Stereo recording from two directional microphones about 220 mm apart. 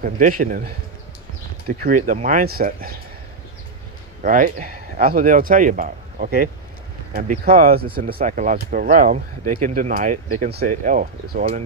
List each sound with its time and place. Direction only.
0.0 s speech: 40° right (ahead or behind)
1.8 s speech: 40° right (ahead or behind)
4.2 s speech: 35° right (ahead or behind)